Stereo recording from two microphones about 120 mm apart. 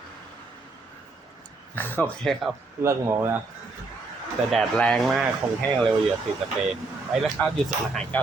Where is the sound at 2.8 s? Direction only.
25° right (ahead or behind).